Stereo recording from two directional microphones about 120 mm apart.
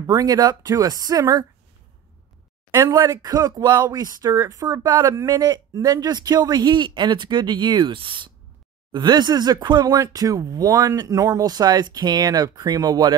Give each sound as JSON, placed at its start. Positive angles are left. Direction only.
{"t": 0.0, "sound": "speech", "side_deg": -30}
{"t": 3.0, "sound": "speech", "side_deg": -30}